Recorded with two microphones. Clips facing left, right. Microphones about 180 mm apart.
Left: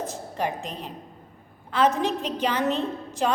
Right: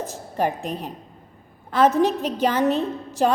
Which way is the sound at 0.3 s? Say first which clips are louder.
Right 6 dB; 45° right (ahead or behind).